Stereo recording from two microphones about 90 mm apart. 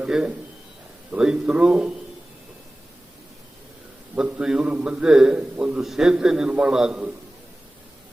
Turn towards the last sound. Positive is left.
turn(degrees=-10)  # may be behind; listen again after turning